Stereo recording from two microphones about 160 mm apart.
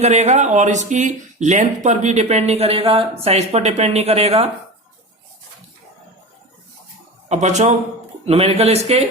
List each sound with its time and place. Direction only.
0.0 s speech: 45° right (ahead or behind)
7.3 s a man's voice: 45° right (ahead or behind)